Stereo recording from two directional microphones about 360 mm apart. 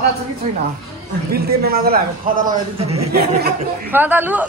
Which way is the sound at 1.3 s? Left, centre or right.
Right.